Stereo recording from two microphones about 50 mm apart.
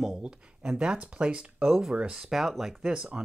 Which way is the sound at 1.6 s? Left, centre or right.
Centre.